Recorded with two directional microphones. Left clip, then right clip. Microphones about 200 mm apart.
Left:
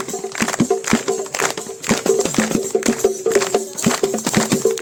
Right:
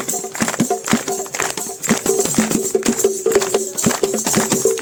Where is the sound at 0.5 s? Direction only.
55° right (ahead or behind).